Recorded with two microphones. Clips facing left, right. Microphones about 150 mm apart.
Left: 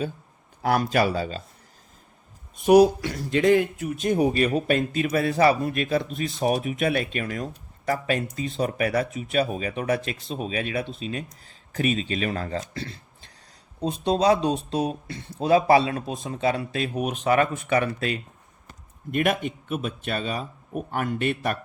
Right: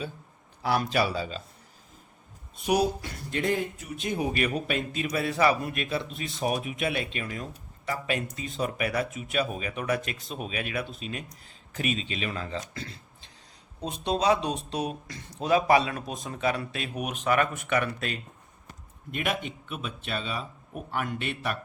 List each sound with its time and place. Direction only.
0.6 s a man's voice: 50° left (ahead or behind)
2.7 s speech: 85° left
3.9 s a man's voice: 45° left (ahead or behind)
4.3 s speech: 30° left (ahead or behind)
4.5 s a man's voice: 45° left (ahead or behind)
12.5 s speech: 35° left (ahead or behind)
19.1 s a man's voice: 50° left (ahead or behind)